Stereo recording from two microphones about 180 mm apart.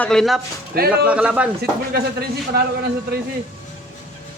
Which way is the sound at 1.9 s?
60° right (ahead or behind).